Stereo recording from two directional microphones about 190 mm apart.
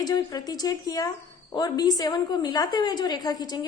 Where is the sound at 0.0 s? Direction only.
20° left (ahead or behind).